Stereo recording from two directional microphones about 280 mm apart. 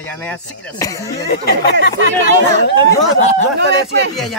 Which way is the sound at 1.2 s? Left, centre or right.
Left.